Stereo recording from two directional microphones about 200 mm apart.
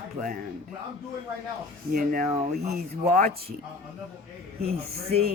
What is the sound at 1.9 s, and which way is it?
Speech, 45° right (ahead or behind).